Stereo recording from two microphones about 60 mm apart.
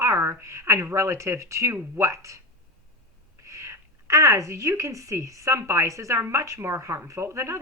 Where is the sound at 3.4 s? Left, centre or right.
Right.